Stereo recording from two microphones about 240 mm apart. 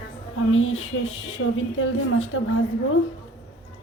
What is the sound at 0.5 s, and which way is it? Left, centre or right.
A woman's voice, left.